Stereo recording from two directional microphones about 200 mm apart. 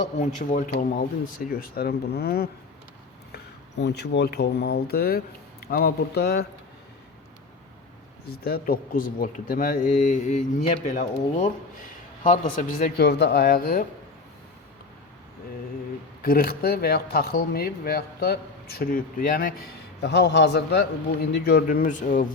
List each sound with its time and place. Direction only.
0.2 s speech: 40° left (ahead or behind)
8.4 s speech: 50° left (ahead or behind)
16.2 s speech: 50° left (ahead or behind)
20.0 s a man's voice: 55° left (ahead or behind); by 22.3 s 40° left (ahead or behind)